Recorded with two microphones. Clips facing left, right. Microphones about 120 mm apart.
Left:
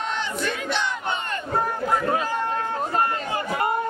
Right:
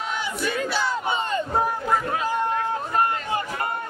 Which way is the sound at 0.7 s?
5° right (ahead or behind).